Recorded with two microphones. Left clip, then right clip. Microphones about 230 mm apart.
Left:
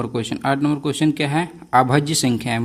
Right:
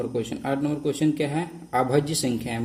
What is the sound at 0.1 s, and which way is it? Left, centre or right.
A man's voice, left.